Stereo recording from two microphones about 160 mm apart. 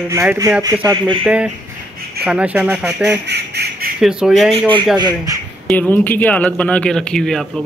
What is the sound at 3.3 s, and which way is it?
Duck, 80° right.